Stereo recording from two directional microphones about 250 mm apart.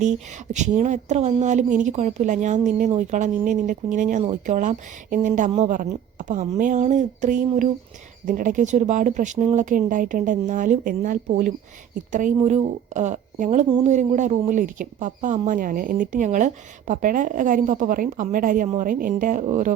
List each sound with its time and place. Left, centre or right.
0.0 s a woman's voice: right